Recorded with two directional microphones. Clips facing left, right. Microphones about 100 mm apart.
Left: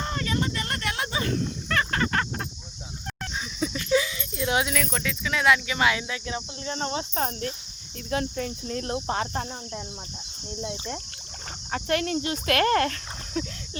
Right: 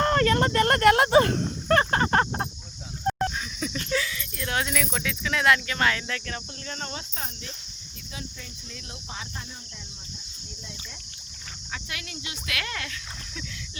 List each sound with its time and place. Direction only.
0.0 s a sound: 60° right (ahead or behind); by 3.3 s 35° right (ahead or behind)
3.3 s a sound: 15° left (ahead or behind)
3.8 s dog: 15° left (ahead or behind)
4.6 s speech: centre (ahead or behind); by 6.7 s 15° left (ahead or behind)
6.7 s cricket: 25° left (ahead or behind)
7.2 s speech: 45° left (ahead or behind)
8.1 s speech: 55° left (ahead or behind)